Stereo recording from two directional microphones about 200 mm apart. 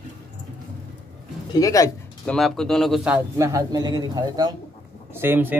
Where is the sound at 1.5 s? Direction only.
15° left (ahead or behind).